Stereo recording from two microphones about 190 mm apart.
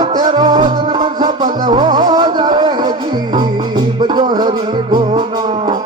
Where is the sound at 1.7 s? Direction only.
20° right (ahead or behind).